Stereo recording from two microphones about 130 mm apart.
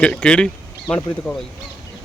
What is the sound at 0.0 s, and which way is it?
Speech, 10° left (ahead or behind).